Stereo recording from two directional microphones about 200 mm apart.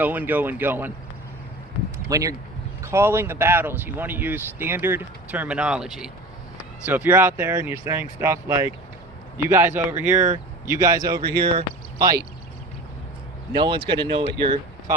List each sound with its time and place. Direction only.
0.0 s speech: 10° right (ahead or behind)
2.0 s speech: 15° right (ahead or behind)
11.2 s speech: 55° right (ahead or behind)
11.4 s speech: 25° right (ahead or behind)
13.5 s speech: 25° right (ahead or behind)